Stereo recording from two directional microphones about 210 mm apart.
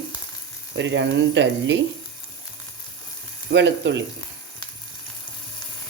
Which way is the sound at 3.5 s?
55° right (ahead or behind).